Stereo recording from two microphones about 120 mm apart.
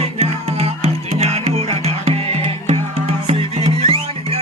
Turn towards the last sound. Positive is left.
turn(degrees=-55)  # may be behind; listen again after turning